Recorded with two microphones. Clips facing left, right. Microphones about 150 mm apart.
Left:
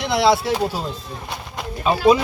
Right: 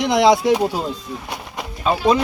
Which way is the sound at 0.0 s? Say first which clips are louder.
Right 3 dB; 15° right (ahead or behind).